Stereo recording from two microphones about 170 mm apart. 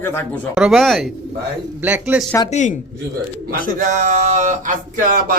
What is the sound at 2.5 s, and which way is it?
Speech, 45° left (ahead or behind).